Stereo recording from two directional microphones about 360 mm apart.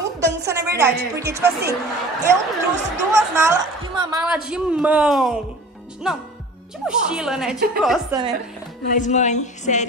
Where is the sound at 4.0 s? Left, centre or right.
Centre.